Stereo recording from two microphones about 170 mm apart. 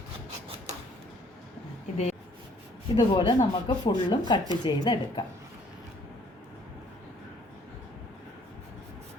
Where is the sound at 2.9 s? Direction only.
30° left (ahead or behind).